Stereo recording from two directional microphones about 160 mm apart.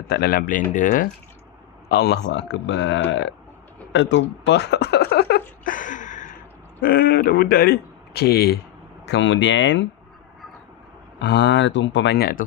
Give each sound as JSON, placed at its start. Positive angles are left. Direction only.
{"t": 0.1, "sound": "a man's voice", "side_deg": 75}
{"t": 0.7, "sound": "speech", "side_deg": 50}
{"t": 1.9, "sound": "speech", "side_deg": 90}
{"t": 3.9, "sound": "a sound", "side_deg": 90}
{"t": 6.8, "sound": "a man's voice", "side_deg": 70}
{"t": 9.0, "sound": "a sound", "side_deg": 90}
{"t": 11.2, "sound": "speech", "side_deg": 90}